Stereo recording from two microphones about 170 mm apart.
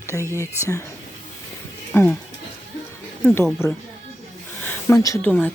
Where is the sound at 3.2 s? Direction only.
10° left (ahead or behind).